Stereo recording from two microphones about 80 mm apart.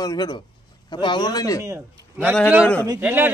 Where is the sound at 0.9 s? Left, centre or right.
Left.